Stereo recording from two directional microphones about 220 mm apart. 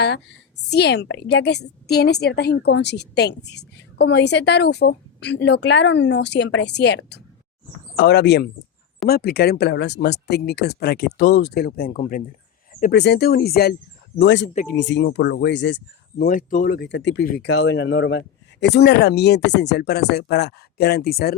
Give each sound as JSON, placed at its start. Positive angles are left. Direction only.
{"t": 0.7, "sound": "a woman's voice", "side_deg": 50}
{"t": 12.9, "sound": "a woman's voice", "side_deg": 50}